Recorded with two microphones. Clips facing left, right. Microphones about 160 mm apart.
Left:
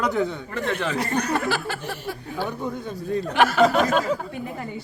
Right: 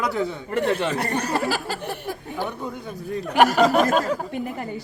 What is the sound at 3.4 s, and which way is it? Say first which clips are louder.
Speech: right 2 dB; 40° right (ahead or behind).